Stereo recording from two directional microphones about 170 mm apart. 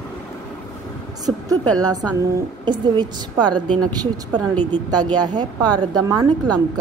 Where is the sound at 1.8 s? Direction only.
20° right (ahead or behind).